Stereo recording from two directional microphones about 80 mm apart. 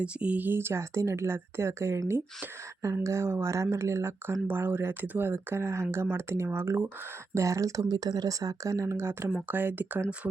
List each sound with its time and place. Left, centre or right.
0.0 s speech: centre